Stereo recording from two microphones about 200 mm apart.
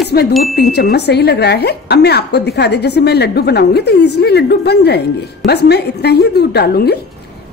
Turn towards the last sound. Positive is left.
turn(degrees=50)  # may be behind; listen again after turning